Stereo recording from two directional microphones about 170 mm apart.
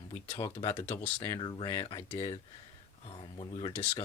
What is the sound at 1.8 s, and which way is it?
Speech, 35° left (ahead or behind).